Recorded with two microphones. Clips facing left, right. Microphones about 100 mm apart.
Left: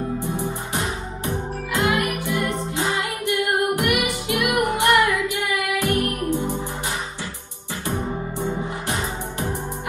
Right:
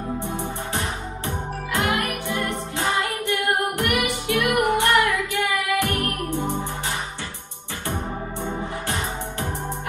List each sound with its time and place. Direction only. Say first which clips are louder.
0.4 s music: left 1 dB; 15° left (ahead or behind)